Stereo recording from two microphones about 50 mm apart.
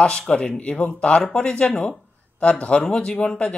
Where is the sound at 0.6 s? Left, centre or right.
Left.